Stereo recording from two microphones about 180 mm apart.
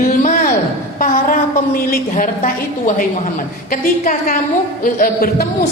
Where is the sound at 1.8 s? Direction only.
50° left (ahead or behind).